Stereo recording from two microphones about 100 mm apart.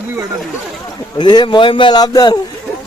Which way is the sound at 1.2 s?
50° left (ahead or behind).